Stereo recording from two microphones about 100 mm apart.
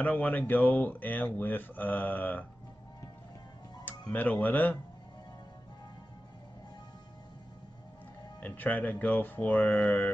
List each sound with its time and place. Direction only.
0.0 s speech: 15° left (ahead or behind)
4.0 s speech: 15° left (ahead or behind)
8.4 s speech: 15° left (ahead or behind)